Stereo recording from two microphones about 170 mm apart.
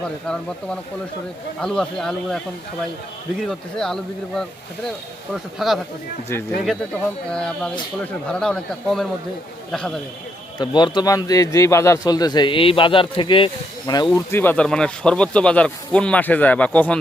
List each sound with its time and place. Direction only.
0.0 s speech: 5° left (ahead or behind)
3.4 s speech: centre (ahead or behind)
10.6 s a man's voice: 25° left (ahead or behind)
14.3 s speech: 10° left (ahead or behind)